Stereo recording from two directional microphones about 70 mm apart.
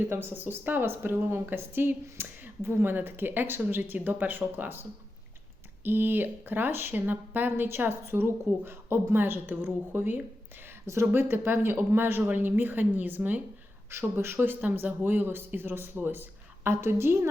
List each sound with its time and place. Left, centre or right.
0.0 s speech: right
13.9 s speech: right